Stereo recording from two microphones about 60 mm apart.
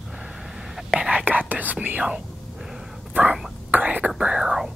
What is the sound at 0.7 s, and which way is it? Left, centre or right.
Whispering, centre.